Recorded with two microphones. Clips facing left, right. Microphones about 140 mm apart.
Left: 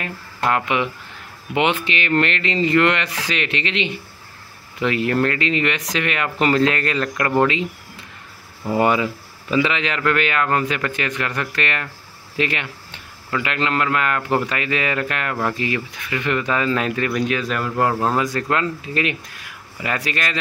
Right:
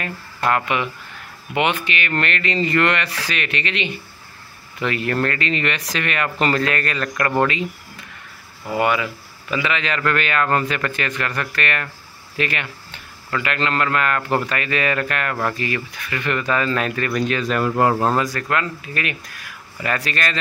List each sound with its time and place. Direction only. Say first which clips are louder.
0.0 s speech: even; 20° left (ahead or behind)
8.7 s speech: left 2 dB; 30° left (ahead or behind); by 18.1 s 5° right (ahead or behind)
18.1 s speech: left 1 dB; 20° left (ahead or behind)